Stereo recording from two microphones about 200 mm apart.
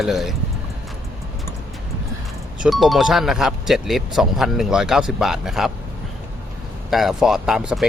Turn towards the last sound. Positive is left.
turn(degrees=-5)  # may be behind; listen again after turning